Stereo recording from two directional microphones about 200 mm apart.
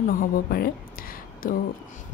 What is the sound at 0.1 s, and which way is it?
Speech, 45° left (ahead or behind).